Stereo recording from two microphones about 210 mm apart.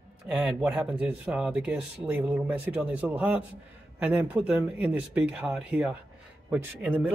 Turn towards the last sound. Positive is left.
turn(degrees=-5)  # may be behind; listen again after turning